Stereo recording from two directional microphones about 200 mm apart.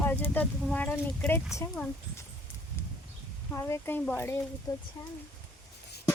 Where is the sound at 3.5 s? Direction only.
10° left (ahead or behind).